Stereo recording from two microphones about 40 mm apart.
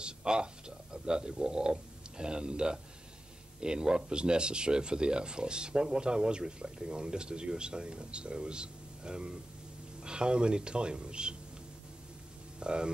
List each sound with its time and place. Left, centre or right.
0.0 s speech: right
12.5 s speech: right